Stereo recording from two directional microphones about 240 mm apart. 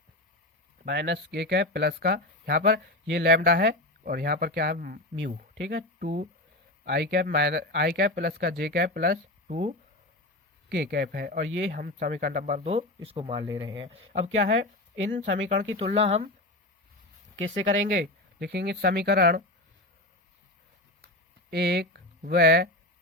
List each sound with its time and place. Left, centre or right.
0.9 s speech: right
17.7 s speech: right
21.5 s speech: right